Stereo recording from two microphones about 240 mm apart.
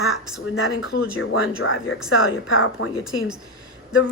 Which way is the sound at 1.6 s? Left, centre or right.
Left.